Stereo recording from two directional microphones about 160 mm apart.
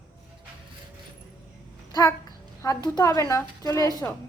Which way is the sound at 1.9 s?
20° left (ahead or behind).